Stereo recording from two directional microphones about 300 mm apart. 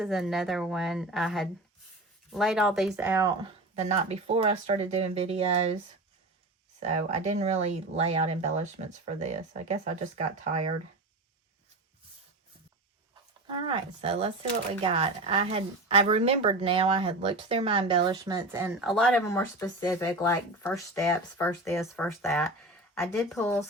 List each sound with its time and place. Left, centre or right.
0.0 s speech: centre
3.8 s speech: centre
6.7 s speech: right
13.5 s a woman's voice: centre